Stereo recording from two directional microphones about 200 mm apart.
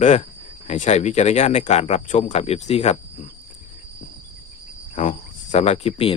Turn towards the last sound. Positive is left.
turn(degrees=30)  # may be behind; listen again after turning